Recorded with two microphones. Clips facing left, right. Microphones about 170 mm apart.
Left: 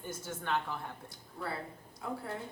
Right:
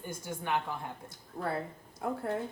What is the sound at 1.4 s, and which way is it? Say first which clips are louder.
Speech: right 5 dB; 45° right (ahead or behind).